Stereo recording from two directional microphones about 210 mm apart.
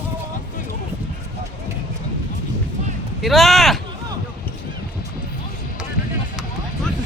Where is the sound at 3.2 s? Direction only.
Centre (ahead or behind).